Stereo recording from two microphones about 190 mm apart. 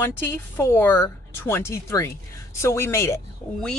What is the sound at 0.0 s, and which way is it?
A woman's voice, 15° left (ahead or behind).